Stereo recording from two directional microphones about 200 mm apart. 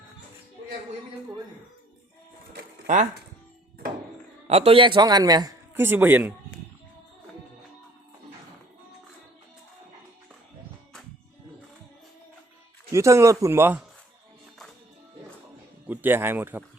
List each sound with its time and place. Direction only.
2.5 s a sound: 45° right (ahead or behind)
4.4 s a man's voice: 30° right (ahead or behind); by 6.3 s 10° right (ahead or behind)
12.9 s speech: 15° right (ahead or behind)
15.9 s speech: 10° right (ahead or behind)